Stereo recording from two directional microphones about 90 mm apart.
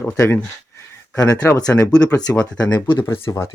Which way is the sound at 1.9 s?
45° left (ahead or behind).